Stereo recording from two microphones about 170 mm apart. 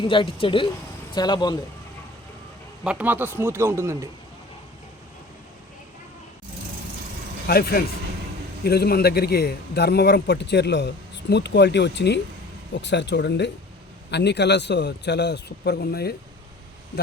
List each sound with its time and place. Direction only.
0.0 s speech: 30° left (ahead or behind)
2.8 s a man's voice: 10° right (ahead or behind)
7.4 s a man's voice: 65° left (ahead or behind)